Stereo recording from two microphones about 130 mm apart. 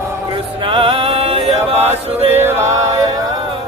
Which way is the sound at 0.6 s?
45° right (ahead or behind).